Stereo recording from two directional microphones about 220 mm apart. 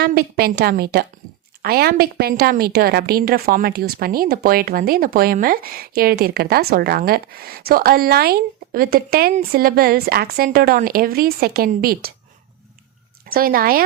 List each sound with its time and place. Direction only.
0.0 s a woman's voice: 45° right (ahead or behind)
13.2 s a woman's voice: 40° right (ahead or behind)